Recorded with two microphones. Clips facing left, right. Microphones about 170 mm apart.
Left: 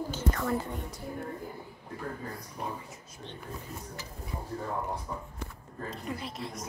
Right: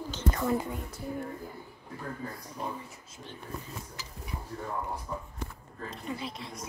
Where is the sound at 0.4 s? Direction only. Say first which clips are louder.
Right 4 dB; 15° right (ahead or behind).